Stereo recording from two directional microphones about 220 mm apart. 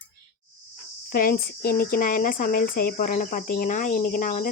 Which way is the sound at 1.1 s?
40° left (ahead or behind).